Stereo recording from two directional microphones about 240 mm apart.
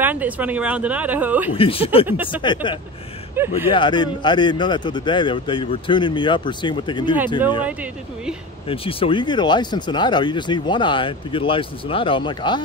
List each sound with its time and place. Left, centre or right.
0.0 s speech: centre
1.5 s speech: left
3.3 s speech: centre
3.7 s speech: centre
7.6 s speech: centre
8.6 s speech: left